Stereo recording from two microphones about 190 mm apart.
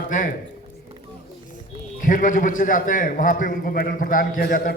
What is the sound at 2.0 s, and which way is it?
A man's voice, 45° left (ahead or behind).